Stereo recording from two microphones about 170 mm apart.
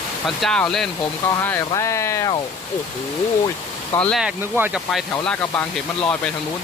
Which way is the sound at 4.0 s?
Centre (ahead or behind).